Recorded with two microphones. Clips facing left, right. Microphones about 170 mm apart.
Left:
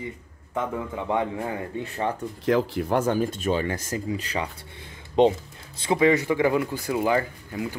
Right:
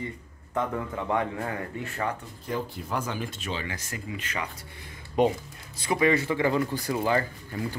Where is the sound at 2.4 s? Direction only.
85° left.